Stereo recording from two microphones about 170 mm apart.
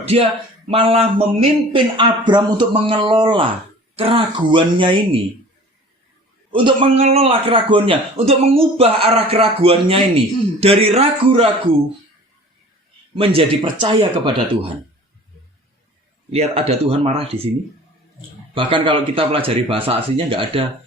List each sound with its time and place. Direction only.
0.0 s a man's voice: 35° right (ahead or behind)
6.5 s a man's voice: 30° right (ahead or behind)
13.1 s speech: 35° right (ahead or behind)
16.3 s a man's voice: 35° right (ahead or behind)
18.5 s a man's voice: 30° right (ahead or behind)